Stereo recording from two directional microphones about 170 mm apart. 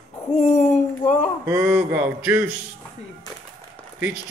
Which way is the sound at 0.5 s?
40° left (ahead or behind).